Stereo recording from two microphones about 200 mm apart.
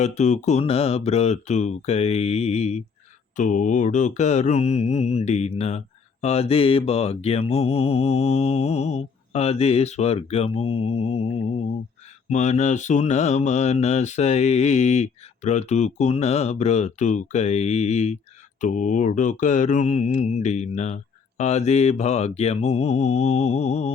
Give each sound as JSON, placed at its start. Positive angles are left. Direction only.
{"t": 0.0, "sound": "mantra", "side_deg": 35}